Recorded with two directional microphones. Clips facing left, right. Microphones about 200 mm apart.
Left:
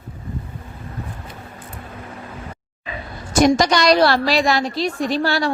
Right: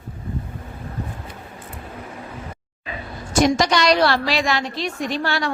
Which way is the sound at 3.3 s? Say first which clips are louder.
Left 3 dB; 40° left (ahead or behind).